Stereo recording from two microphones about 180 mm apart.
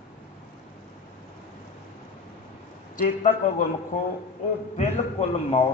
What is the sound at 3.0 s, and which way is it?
Speech, 45° left (ahead or behind).